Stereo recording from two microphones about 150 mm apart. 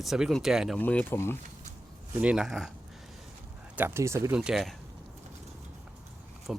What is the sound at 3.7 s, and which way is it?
Speech, 15° right (ahead or behind).